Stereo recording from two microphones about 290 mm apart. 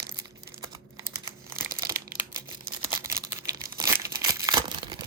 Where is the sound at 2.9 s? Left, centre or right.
Centre.